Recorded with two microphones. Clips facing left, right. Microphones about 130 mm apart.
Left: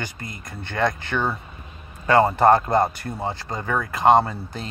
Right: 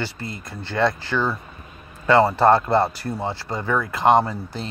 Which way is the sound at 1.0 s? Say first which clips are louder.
Right 1 dB; 60° left (ahead or behind).